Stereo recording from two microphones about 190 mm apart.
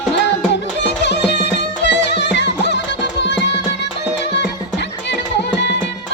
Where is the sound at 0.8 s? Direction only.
65° left (ahead or behind).